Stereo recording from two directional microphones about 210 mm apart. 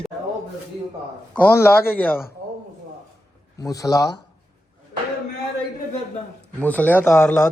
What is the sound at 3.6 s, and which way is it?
Speech, 15° left (ahead or behind).